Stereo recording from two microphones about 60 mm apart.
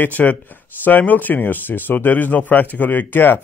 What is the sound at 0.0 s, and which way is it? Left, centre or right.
Speech, left.